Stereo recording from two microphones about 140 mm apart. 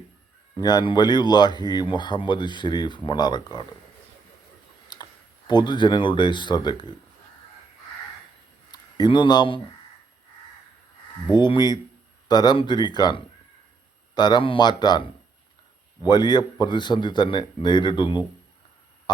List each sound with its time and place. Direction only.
0.5 s speech: 30° left (ahead or behind)
4.9 s clicking: 30° left (ahead or behind)
5.5 s speech: 30° left (ahead or behind)
8.7 s speech: 30° left (ahead or behind)
11.3 s speech: 35° left (ahead or behind)
16.0 s speech: 30° left (ahead or behind)